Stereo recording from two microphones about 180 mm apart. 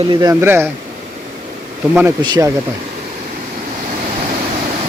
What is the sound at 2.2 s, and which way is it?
Speech, 25° right (ahead or behind).